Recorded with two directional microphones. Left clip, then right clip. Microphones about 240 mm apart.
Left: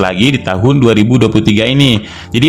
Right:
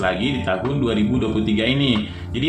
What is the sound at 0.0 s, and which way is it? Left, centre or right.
Speech, left.